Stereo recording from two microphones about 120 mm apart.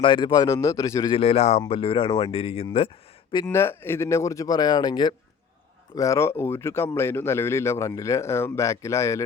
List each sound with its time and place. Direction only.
0.0 s speech: 40° left (ahead or behind)
0.3 s a man's voice: 25° left (ahead or behind)
1.1 s speech: 55° left (ahead or behind)
3.4 s a man's voice: 20° left (ahead or behind)